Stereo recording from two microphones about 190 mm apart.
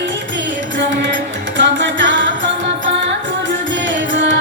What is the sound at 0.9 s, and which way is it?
Music, 75° right (ahead or behind).